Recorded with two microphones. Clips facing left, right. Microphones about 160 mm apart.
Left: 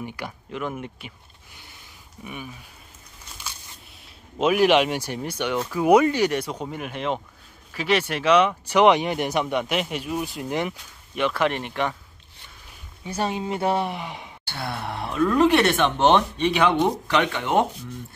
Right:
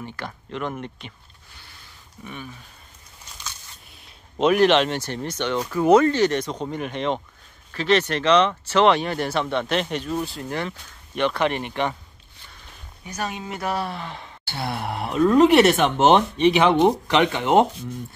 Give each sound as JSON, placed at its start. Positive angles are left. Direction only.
{"t": 0.0, "sound": "speech", "side_deg": 10}
{"t": 4.4, "sound": "speech", "side_deg": 5}
{"t": 11.1, "sound": "speech", "side_deg": 5}
{"t": 13.0, "sound": "speech", "side_deg": 30}
{"t": 13.8, "sound": "speech", "side_deg": 15}
{"t": 14.6, "sound": "speech", "side_deg": -20}